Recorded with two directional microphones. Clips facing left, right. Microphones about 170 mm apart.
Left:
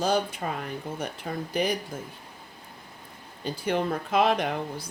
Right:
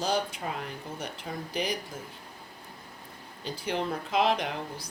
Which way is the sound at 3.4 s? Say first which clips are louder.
Left 4 dB; 50° left (ahead or behind).